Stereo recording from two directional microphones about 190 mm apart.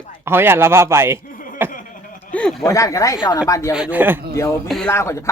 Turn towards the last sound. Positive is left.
turn(degrees=15)  # may be behind; listen again after turning